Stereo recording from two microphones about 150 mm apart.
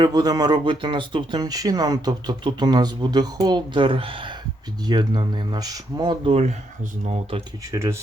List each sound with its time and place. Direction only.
0.0 s speech: 25° right (ahead or behind)
7.7 s speech: 20° right (ahead or behind)